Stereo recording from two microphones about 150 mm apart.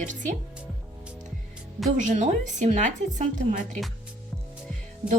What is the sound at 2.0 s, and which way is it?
Speech, 55° right (ahead or behind).